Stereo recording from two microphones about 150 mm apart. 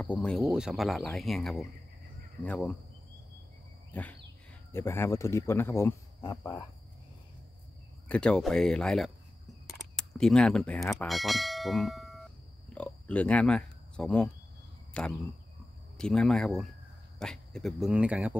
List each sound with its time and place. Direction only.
0.0 s speech: 5° left (ahead or behind)
0.5 s speech: 5° right (ahead or behind)
3.9 s a sound: 10° left (ahead or behind)
4.7 s speech: 15° left (ahead or behind)
6.2 s cricket: 25° left (ahead or behind)
8.1 s speech: 5° left (ahead or behind)